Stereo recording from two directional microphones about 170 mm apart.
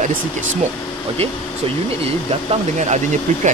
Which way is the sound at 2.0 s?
40° right (ahead or behind).